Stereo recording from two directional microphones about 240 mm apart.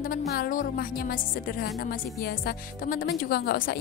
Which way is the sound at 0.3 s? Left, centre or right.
Left.